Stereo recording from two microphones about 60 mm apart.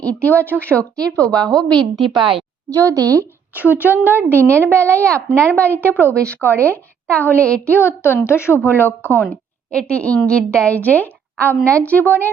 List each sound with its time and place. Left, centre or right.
0.0 s a woman's voice: left
1.7 s a woman's voice: centre
2.6 s a woman's voice: right
3.5 s a woman's voice: right
4.4 s a woman's voice: left
6.2 s speech: right
6.6 s a woman's voice: left
7.7 s a woman's voice: left
9.7 s a woman's voice: left